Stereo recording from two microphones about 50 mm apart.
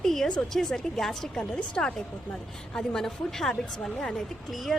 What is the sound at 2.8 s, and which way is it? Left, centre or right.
A woman's voice, centre.